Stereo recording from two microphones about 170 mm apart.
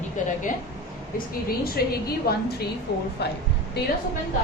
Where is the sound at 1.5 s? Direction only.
65° left (ahead or behind).